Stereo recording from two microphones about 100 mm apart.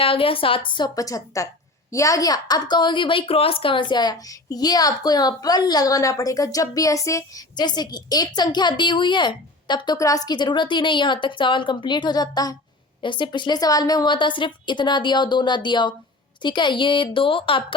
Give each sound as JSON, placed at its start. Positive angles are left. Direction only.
{"t": 0.0, "sound": "a woman's voice", "side_deg": 70}
{"t": 0.9, "sound": "a woman's voice", "side_deg": 35}
{"t": 7.5, "sound": "a woman's voice", "side_deg": 45}
{"t": 10.0, "sound": "a woman's voice", "side_deg": 35}
{"t": 13.0, "sound": "a woman's voice", "side_deg": 55}